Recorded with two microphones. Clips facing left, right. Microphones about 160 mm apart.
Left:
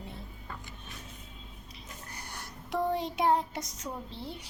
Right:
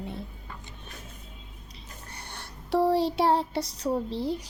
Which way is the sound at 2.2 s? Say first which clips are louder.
Right 2 dB; 30° right (ahead or behind).